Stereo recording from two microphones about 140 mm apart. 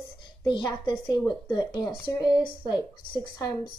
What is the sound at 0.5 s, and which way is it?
A woman's voice, 35° left (ahead or behind).